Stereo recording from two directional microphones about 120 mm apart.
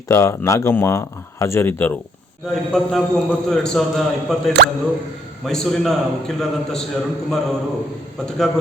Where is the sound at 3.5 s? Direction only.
5° left (ahead or behind).